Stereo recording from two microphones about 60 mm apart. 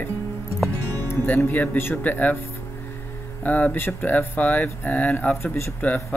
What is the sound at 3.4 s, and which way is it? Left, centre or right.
Speech, left.